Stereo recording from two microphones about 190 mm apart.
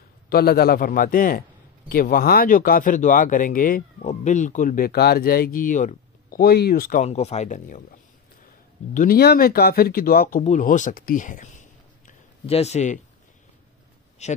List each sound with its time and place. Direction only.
0.3 s speech: 55° left (ahead or behind)
7.1 s speech: 35° left (ahead or behind)
12.1 s a sound: 35° left (ahead or behind)
14.2 s speech: 35° left (ahead or behind)